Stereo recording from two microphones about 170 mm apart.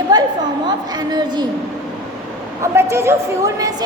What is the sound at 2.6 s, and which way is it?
A woman's voice, 15° right (ahead or behind).